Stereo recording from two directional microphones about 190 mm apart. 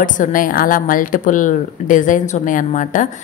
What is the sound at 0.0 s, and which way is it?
A woman's voice, 45° left (ahead or behind).